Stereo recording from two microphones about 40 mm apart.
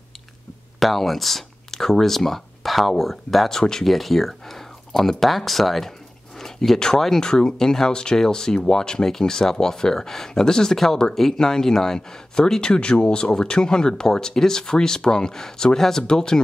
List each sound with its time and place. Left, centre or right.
0.7 s speech: centre
3.4 s speech: centre